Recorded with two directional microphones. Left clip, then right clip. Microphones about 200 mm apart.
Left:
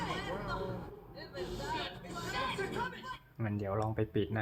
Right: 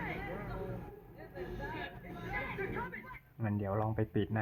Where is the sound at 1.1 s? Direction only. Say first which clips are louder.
Left 4 dB; 25° left (ahead or behind).